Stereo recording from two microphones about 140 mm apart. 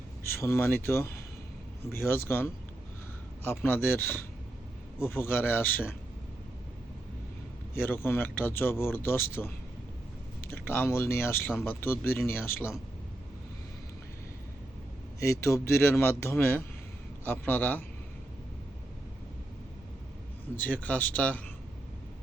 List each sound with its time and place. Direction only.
0.4 s speech: 20° left (ahead or behind)
7.8 s speech: 15° left (ahead or behind)
10.5 s speech: 15° left (ahead or behind)
15.2 s speech: 20° left (ahead or behind)
20.7 s speech: 10° left (ahead or behind)